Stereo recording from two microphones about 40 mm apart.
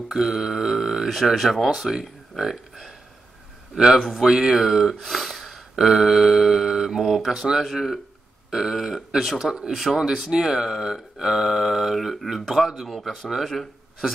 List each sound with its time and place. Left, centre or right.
0.1 s speech: centre
5.8 s speech: centre
7.0 s speech: centre
7.2 s speech: centre
7.6 s speech: centre